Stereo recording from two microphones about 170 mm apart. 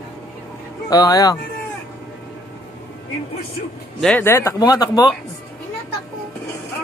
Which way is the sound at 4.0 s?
5° left (ahead or behind).